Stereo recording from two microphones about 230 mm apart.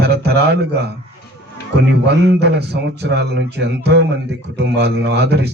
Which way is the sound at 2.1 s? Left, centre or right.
Right.